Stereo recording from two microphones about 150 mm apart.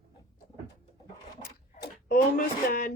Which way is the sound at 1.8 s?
80° left.